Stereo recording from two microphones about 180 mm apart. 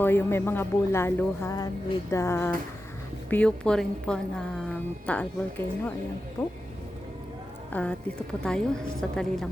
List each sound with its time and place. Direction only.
0.0 s a woman's voice: 10° left (ahead or behind)
7.7 s a woman's voice: 5° left (ahead or behind)